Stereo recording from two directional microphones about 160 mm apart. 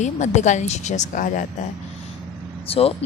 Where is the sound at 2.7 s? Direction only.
40° left (ahead or behind).